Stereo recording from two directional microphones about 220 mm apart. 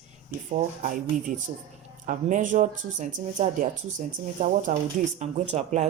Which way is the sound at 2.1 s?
35° right (ahead or behind).